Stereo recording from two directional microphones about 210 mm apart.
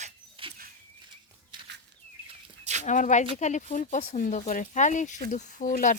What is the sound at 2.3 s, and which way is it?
Chicken, 30° right (ahead or behind).